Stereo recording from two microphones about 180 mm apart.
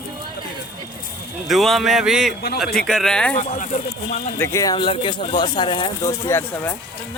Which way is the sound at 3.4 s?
40° left (ahead or behind).